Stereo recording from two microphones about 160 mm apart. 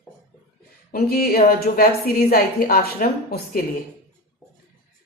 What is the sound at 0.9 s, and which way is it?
A woman's voice, 70° left (ahead or behind).